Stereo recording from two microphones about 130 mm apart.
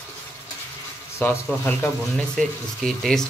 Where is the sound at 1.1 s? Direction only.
20° left (ahead or behind).